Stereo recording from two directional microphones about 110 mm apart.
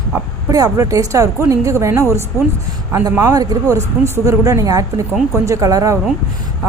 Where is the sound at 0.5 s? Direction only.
35° right (ahead or behind).